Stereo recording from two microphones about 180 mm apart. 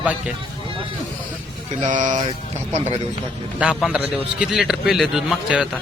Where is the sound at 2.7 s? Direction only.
40° right (ahead or behind).